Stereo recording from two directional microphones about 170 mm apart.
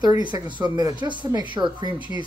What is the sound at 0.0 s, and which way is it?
Speech, 25° right (ahead or behind).